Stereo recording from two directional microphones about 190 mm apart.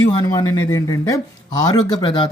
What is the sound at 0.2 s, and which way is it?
Speech, 20° left (ahead or behind).